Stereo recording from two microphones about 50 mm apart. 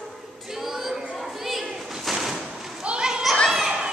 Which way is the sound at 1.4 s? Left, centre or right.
Centre.